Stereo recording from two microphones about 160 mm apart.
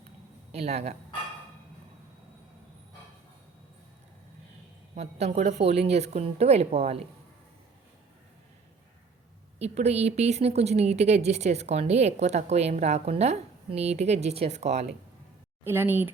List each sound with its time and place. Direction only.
0.5 s a woman's voice: 40° right (ahead or behind)
4.9 s a woman's voice: 40° right (ahead or behind)
9.6 s speech: 40° right (ahead or behind)
15.6 s speech: 15° right (ahead or behind)